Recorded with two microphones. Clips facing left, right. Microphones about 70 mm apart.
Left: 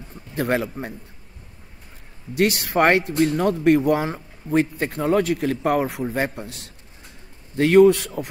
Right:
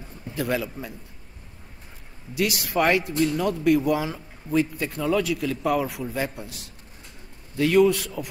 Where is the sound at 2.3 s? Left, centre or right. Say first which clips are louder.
Left 4 dB; left.